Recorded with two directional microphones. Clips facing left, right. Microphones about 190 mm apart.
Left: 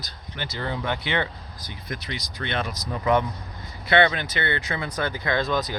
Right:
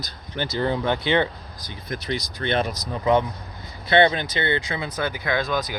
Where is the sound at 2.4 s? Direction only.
35° right (ahead or behind).